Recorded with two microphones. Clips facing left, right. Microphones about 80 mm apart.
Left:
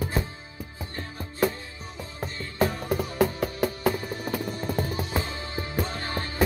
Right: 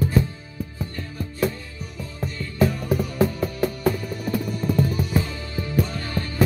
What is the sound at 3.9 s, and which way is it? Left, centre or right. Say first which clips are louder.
Music: right 3 dB; left.